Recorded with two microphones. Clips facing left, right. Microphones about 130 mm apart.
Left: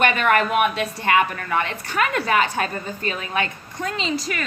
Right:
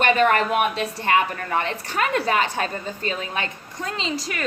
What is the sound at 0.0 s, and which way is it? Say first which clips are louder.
A woman's voice: right 1 dB; 35° right (ahead or behind).